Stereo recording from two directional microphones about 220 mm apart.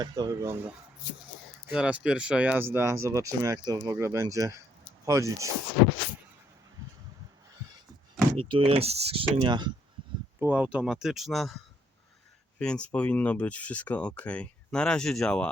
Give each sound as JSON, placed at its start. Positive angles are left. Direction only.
{"t": 0.0, "sound": "speech", "side_deg": -15}
{"t": 1.7, "sound": "speech", "side_deg": -5}
{"t": 8.4, "sound": "speech", "side_deg": -25}
{"t": 10.4, "sound": "speech", "side_deg": -5}